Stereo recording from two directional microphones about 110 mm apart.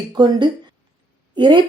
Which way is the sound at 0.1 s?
40° right (ahead or behind).